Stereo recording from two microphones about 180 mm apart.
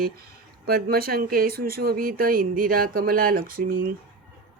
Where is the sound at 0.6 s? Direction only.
60° right (ahead or behind).